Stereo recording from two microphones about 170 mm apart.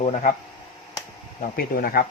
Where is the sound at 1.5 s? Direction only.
60° left (ahead or behind).